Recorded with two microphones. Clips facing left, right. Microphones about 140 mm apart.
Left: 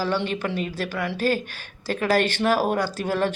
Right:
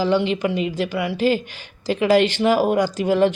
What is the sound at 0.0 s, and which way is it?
Speech, 15° right (ahead or behind).